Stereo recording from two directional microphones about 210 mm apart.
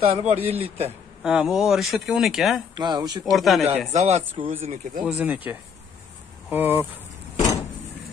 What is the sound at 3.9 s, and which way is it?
Speech, 30° right (ahead or behind).